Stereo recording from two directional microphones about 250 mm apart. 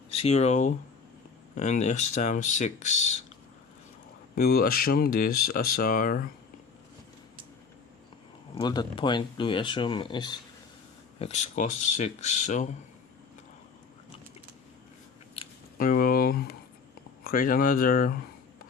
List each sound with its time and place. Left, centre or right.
0.2 s speech: left
4.4 s speech: left
8.5 s speech: centre
15.4 s speech: left